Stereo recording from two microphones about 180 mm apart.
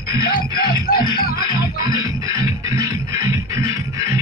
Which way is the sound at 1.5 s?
20° right (ahead or behind).